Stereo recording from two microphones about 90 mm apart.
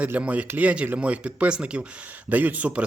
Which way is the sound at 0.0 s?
15° right (ahead or behind).